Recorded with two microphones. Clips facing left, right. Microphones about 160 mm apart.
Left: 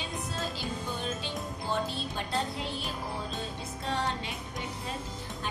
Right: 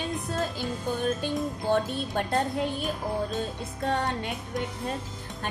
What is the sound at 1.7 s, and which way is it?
A woman's voice, 60° right (ahead or behind).